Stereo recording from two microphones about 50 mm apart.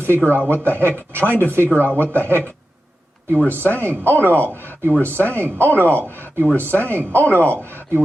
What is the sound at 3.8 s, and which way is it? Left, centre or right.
Speech, right.